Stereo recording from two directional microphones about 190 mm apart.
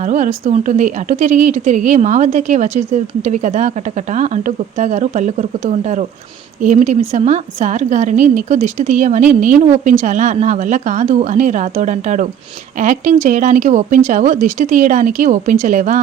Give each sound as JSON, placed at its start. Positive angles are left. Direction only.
{"t": 0.0, "sound": "a woman's voice", "side_deg": -40}